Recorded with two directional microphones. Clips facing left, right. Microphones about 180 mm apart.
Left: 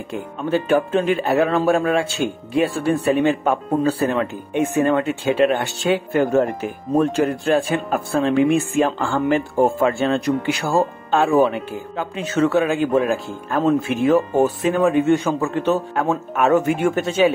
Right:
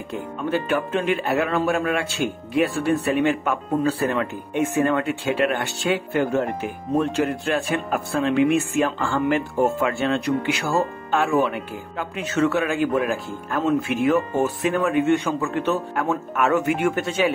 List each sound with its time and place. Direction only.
0.5 s speech: 30° left (ahead or behind)
7.0 s speech: 35° left (ahead or behind)